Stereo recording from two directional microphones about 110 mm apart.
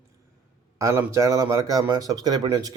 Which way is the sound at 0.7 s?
30° right (ahead or behind).